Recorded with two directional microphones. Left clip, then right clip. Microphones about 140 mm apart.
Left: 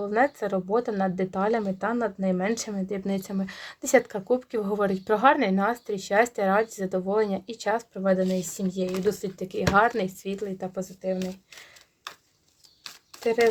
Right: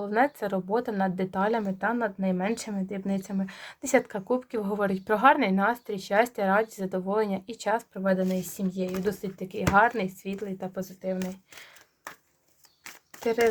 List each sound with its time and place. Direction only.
0.0 s speech: 25° left (ahead or behind); by 3.0 s 40° left (ahead or behind)
3.0 s speech: 55° left (ahead or behind)
3.2 s speech: 40° left (ahead or behind)
3.9 s speech: 30° left (ahead or behind)
8.6 s speech: 35° left (ahead or behind)
10.3 s speech: 20° left (ahead or behind)
13.2 s speech: 15° left (ahead or behind)